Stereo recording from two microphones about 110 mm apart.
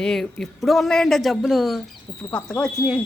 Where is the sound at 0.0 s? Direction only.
5° left (ahead or behind).